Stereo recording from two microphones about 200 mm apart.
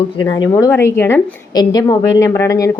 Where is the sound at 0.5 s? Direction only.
10° left (ahead or behind).